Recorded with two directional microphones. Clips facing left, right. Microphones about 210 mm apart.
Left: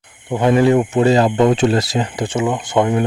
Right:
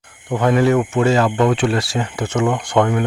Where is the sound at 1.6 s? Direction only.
40° left (ahead or behind).